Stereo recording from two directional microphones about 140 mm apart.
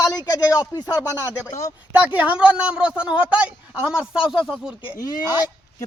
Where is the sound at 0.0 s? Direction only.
25° left (ahead or behind).